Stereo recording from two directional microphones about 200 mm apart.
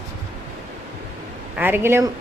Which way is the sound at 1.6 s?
10° right (ahead or behind).